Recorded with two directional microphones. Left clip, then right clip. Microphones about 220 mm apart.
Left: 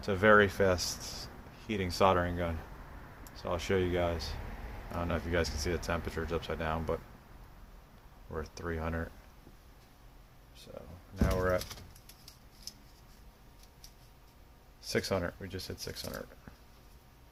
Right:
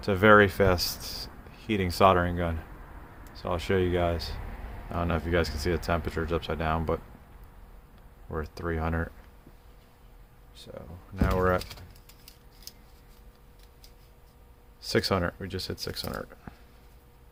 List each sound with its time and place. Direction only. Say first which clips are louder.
0.0 s speech: right 5 dB; 25° right (ahead or behind)
8.3 s speech: right 6 dB; 25° right (ahead or behind)
11.3 s speech: right 5 dB; 30° right (ahead or behind)
14.8 s speech: right 6 dB; 35° right (ahead or behind)